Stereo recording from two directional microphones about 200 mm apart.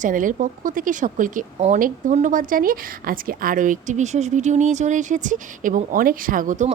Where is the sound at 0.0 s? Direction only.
40° right (ahead or behind).